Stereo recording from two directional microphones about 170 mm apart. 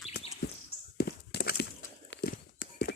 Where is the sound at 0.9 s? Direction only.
70° left (ahead or behind).